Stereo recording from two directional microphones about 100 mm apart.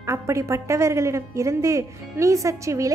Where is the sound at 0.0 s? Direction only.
30° right (ahead or behind).